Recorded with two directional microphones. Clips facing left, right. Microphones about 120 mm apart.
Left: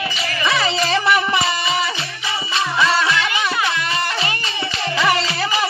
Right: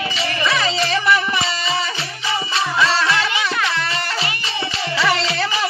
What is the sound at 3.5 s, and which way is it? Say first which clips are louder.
Music: left 1 dB; 10° left (ahead or behind).